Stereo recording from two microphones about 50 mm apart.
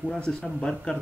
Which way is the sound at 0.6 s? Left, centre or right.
Centre.